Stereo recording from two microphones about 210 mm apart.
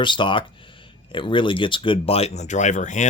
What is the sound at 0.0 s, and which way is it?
Speech, 20° left (ahead or behind).